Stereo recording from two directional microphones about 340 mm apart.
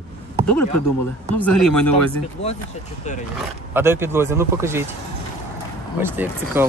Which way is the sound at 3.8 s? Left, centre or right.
Centre.